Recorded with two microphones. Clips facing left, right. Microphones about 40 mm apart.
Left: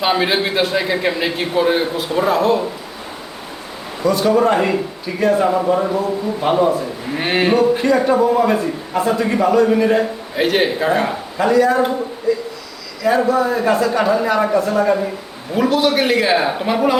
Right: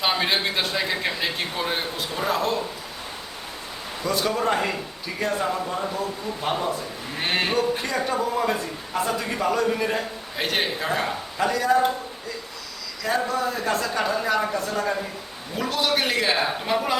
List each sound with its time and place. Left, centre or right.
0.0 s a man's voice: centre
4.0 s a man's voice: centre
5.5 s a man's voice: left; by 17.0 s centre